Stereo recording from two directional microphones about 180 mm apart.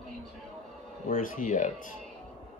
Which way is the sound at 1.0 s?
45° left (ahead or behind).